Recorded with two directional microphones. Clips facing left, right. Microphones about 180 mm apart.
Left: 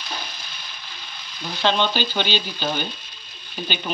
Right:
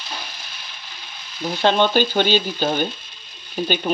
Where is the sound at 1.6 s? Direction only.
50° right (ahead or behind).